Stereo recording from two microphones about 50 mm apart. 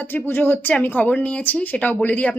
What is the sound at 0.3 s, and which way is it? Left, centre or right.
Speech, left.